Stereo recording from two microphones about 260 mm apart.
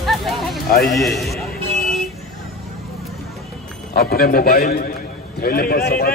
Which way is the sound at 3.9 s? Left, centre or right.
Left.